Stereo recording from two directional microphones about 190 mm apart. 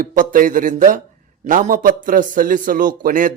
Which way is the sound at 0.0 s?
45° right (ahead or behind).